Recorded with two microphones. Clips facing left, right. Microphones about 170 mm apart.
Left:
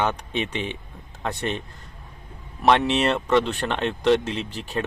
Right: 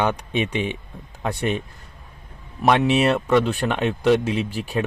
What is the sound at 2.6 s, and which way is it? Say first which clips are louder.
Speech: right 2 dB; 10° right (ahead or behind).